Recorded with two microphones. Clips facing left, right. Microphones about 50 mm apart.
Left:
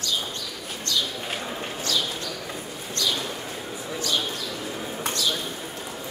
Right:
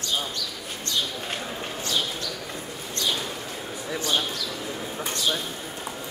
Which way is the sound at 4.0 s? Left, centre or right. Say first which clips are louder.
Right 1 dB; right.